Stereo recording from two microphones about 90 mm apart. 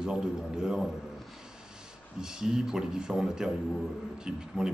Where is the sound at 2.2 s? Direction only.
5° right (ahead or behind).